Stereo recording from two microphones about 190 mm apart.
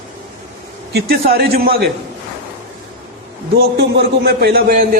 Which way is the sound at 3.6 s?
55° right (ahead or behind).